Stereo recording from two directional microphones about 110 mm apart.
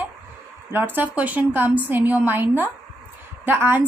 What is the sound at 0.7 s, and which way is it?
A woman's voice, 20° right (ahead or behind).